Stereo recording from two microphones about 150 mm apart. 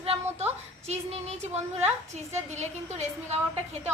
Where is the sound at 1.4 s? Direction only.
45° right (ahead or behind).